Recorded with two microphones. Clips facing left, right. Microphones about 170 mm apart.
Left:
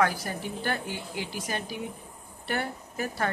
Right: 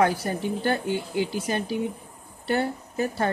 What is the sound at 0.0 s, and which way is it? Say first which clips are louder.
A woman's voice: right 4 dB; 25° right (ahead or behind).